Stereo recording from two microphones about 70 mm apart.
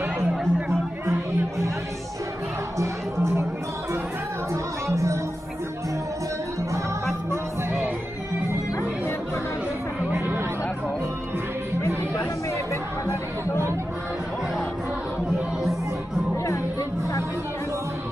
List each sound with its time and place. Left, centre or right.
0.2 s chatter: centre
2.8 s music: right
4.8 s music: right
7.2 s music: right